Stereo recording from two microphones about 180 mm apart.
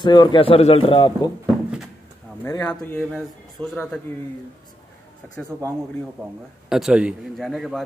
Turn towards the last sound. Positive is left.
turn(degrees=0)  # may be behind; listen again after turning